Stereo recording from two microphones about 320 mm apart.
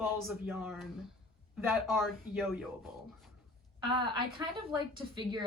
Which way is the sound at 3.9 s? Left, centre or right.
Centre.